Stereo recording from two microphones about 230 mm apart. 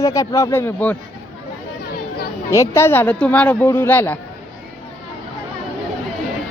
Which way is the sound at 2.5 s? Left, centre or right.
Centre.